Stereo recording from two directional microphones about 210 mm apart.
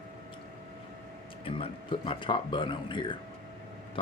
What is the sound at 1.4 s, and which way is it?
Speech, 25° left (ahead or behind).